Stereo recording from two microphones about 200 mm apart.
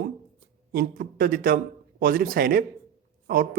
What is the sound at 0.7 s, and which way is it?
A man's voice, 45° right (ahead or behind).